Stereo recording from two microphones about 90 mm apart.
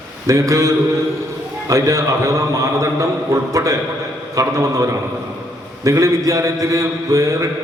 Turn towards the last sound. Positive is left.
turn(degrees=-35)  # may be behind; listen again after turning